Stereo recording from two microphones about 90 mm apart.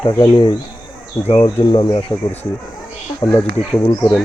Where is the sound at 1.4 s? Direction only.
60° left (ahead or behind).